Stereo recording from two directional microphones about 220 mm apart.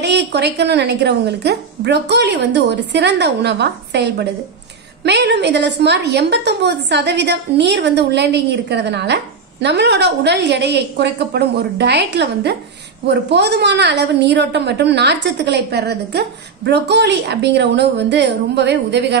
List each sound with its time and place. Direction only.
0.0 s a woman's voice: 50° right (ahead or behind)